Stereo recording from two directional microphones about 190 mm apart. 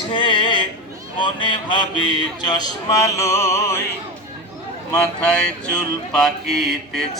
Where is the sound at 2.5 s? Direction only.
20° left (ahead or behind).